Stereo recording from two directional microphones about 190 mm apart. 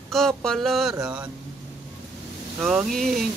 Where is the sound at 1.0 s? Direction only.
5° right (ahead or behind).